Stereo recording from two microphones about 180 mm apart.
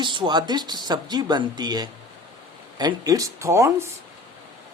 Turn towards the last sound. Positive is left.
turn(degrees=-15)  # may be behind; listen again after turning